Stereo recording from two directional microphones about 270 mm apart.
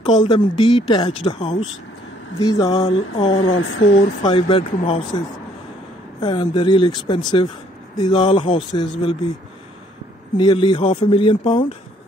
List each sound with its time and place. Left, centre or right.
0.0 s a woman's voice: centre
3.5 s speech: left
4.2 s speech: centre
6.2 s a woman's voice: centre
10.3 s a woman's voice: centre